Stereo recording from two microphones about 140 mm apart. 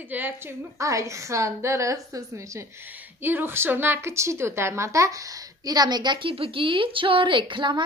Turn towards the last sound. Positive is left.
turn(degrees=-35)  # may be behind; listen again after turning